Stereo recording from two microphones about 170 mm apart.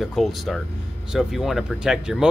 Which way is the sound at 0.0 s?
Centre (ahead or behind).